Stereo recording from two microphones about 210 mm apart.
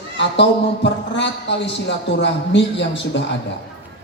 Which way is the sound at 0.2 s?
60° left (ahead or behind).